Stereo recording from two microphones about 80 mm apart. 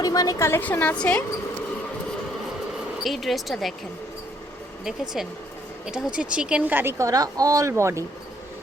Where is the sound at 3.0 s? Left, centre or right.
Centre.